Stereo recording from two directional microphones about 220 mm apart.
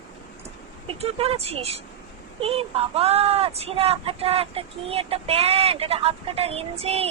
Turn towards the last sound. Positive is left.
turn(degrees=-25)  # may be behind; listen again after turning